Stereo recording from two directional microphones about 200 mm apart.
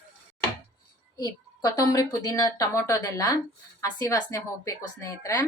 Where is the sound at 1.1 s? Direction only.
20° left (ahead or behind).